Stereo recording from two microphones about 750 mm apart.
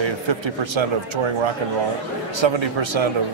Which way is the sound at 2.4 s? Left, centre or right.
Right.